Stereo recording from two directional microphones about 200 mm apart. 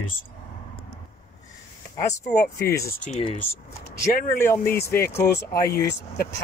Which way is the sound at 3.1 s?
35° left (ahead or behind).